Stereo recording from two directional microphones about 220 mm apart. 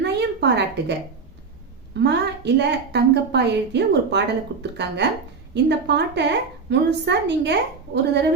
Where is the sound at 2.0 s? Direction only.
50° right (ahead or behind).